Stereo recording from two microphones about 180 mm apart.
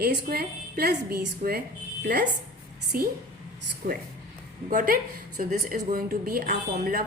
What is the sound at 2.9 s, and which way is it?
Speech, 55° right (ahead or behind).